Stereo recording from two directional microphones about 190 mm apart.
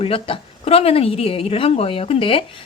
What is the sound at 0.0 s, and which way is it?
A woman's voice, 30° left (ahead or behind).